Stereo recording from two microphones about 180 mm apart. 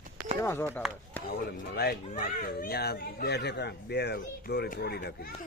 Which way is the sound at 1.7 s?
55° left (ahead or behind).